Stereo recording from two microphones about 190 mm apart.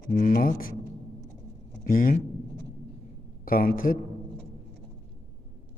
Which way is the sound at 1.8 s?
45° left (ahead or behind).